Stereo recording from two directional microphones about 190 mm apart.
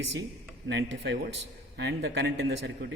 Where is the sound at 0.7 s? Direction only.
65° right (ahead or behind).